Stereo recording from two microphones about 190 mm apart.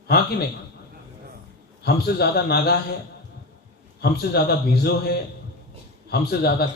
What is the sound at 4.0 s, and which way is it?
A man's voice, 60° left (ahead or behind).